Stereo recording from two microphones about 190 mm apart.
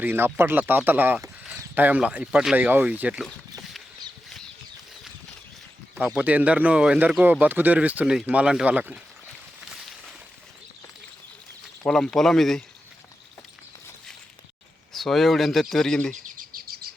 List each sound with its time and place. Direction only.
0.0 s speech: 10° right (ahead or behind)
3.6 s a sound: centre (ahead or behind)
5.9 s speech: 5° right (ahead or behind)
9.6 s a sound: centre (ahead or behind)
11.9 s speech: centre (ahead or behind)
14.9 s speech: centre (ahead or behind)
16.1 s bird: 45° right (ahead or behind)